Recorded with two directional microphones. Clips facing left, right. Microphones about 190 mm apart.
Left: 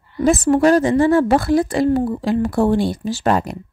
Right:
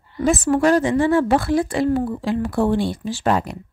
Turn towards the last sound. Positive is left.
turn(degrees=45)  # may be behind; listen again after turning